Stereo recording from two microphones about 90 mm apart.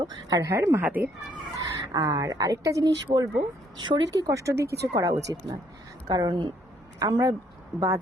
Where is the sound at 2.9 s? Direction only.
50° right (ahead or behind).